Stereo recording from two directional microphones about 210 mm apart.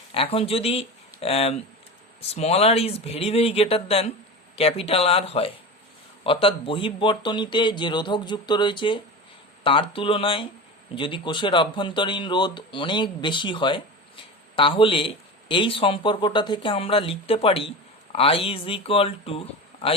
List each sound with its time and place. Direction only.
0.1 s speech: 25° left (ahead or behind)